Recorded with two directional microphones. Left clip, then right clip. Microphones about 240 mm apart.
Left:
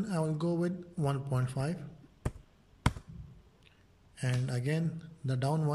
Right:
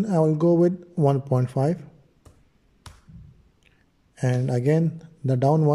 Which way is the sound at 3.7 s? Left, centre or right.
Right.